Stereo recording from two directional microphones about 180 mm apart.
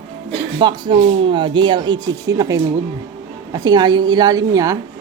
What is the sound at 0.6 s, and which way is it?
A woman's voice, 30° right (ahead or behind).